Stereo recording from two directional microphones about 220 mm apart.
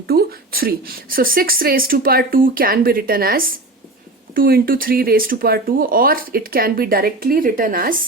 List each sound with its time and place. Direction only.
0.1 s speech: 45° right (ahead or behind)